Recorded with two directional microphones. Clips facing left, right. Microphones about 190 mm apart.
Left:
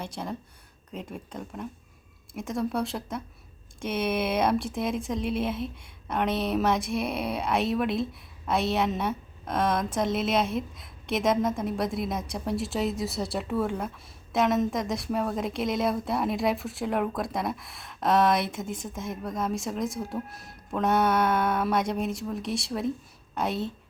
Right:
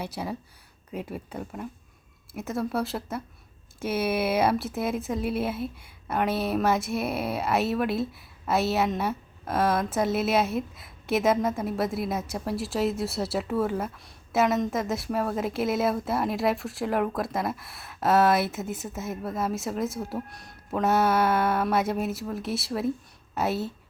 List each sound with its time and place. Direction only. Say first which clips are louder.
0.0 s a woman's voice: right 2 dB; 5° right (ahead or behind)